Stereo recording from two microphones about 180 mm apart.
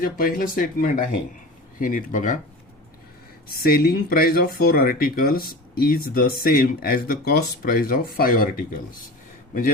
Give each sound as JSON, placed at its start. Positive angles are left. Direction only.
{"t": 0.0, "sound": "speech", "side_deg": 50}
{"t": 3.5, "sound": "speech", "side_deg": 55}